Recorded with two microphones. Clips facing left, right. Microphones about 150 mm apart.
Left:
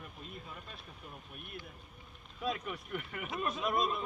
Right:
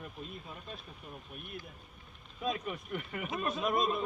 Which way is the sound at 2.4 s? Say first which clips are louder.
Right 2 dB; 20° right (ahead or behind).